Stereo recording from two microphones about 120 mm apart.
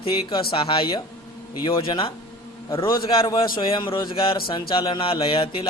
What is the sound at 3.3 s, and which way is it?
A man's voice, 45° left (ahead or behind).